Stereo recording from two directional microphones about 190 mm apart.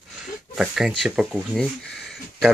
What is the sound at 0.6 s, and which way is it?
Speech, centre (ahead or behind).